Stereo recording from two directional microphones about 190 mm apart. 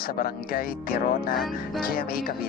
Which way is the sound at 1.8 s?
50° left (ahead or behind).